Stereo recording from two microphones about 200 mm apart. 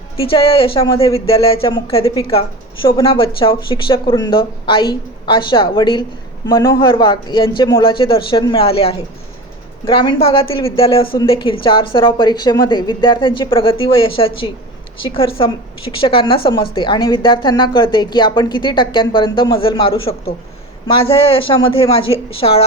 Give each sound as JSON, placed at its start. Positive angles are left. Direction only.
{"t": 0.2, "sound": "speech", "side_deg": 25}